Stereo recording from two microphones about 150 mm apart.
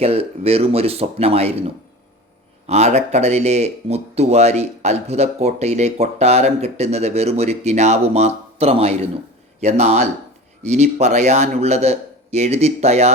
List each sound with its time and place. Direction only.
0.0 s speech: 40° right (ahead or behind)